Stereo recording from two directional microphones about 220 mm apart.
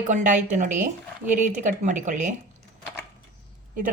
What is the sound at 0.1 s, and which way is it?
Speech, 35° right (ahead or behind).